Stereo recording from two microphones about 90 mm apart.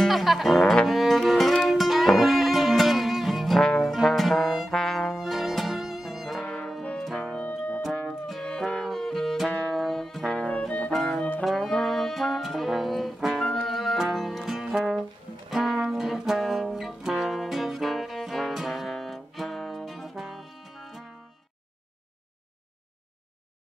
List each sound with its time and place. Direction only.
0.0 s music: centre (ahead or behind)
3.8 s brass instrument: centre (ahead or behind)
6.4 s brass instrument: 10° left (ahead or behind)
7.9 s music: 5° left (ahead or behind)
10.9 s music: centre (ahead or behind)
11.1 s brass instrument: 15° left (ahead or behind)
11.4 s brass instrument: 5° left (ahead or behind)
15.5 s music: centre (ahead or behind)